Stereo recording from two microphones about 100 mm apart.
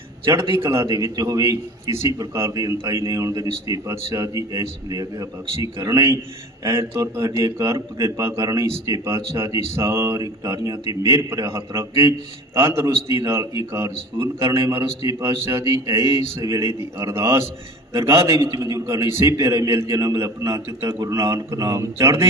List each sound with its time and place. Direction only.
0.5 s a man's voice: 30° right (ahead or behind)